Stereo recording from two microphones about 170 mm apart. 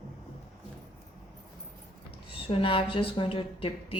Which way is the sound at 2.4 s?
30° left (ahead or behind).